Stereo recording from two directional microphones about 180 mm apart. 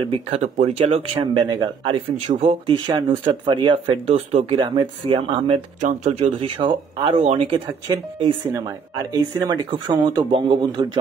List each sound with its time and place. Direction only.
0.0 s speech: 30° right (ahead or behind)
4.6 s speech: 25° right (ahead or behind)